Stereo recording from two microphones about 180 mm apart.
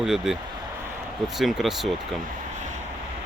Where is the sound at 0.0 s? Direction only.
Centre (ahead or behind).